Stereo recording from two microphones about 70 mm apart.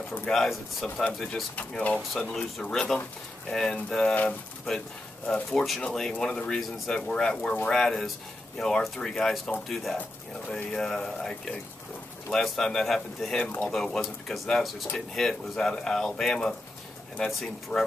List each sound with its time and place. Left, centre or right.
0.2 s speech: centre
1.7 s speech: centre
2.1 s speech: centre
4.1 s speech: left
4.6 s speech: centre